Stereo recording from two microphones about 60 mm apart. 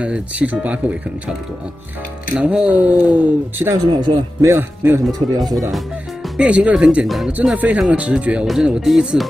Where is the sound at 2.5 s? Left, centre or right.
Right.